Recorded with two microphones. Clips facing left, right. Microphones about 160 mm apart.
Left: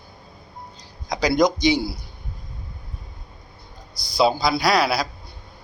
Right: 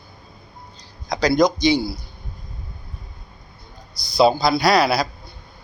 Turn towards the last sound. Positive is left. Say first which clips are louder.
# right 3 dB
turn(degrees=0)  # may be behind; listen again after turning